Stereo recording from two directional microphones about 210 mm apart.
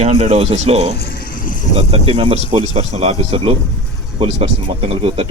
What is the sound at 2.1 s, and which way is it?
Speech, 25° right (ahead or behind).